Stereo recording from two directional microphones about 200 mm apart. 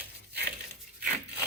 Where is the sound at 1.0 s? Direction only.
10° right (ahead or behind).